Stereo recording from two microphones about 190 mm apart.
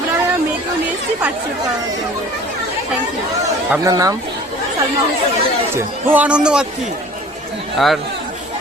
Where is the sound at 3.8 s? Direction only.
20° right (ahead or behind).